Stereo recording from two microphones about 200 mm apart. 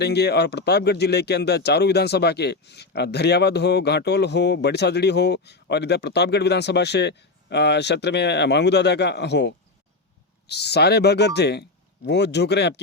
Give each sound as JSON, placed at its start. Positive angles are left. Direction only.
{"t": 0.0, "sound": "speech", "side_deg": 55}